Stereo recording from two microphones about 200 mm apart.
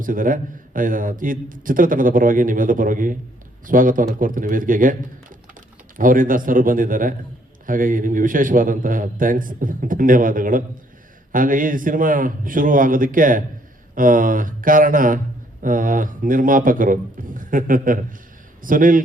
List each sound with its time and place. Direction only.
0.0 s a man's voice: 45° right (ahead or behind)
6.0 s a man's voice: 45° right (ahead or behind)